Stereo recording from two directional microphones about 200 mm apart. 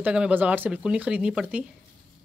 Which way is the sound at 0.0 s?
5° right (ahead or behind).